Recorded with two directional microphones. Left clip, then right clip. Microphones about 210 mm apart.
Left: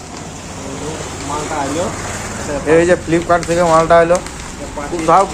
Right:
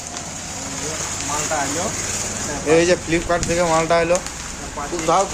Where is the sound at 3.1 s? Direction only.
Centre (ahead or behind).